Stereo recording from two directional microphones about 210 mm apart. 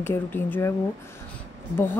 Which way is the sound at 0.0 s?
10° left (ahead or behind).